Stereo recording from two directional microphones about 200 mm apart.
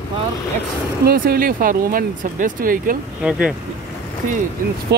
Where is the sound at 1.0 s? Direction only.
50° right (ahead or behind).